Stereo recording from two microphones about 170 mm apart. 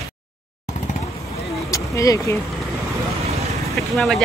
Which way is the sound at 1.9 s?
20° left (ahead or behind).